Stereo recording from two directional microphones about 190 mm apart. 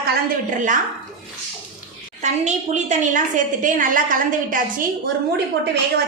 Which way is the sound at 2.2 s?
40° right (ahead or behind).